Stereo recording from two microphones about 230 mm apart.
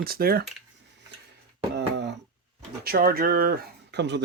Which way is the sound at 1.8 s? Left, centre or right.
Right.